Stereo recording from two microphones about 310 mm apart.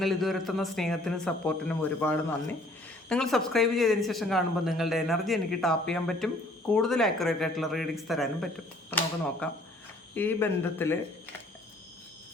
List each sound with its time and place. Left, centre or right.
0.0 s a man's voice: centre